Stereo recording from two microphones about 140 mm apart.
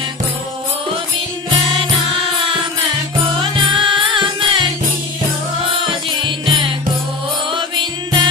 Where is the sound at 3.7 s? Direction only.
35° right (ahead or behind).